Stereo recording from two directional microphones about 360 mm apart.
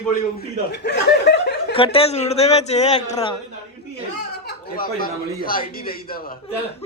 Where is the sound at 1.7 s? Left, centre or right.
Centre.